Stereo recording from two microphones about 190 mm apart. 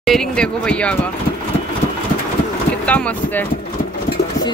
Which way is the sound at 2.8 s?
5° left (ahead or behind).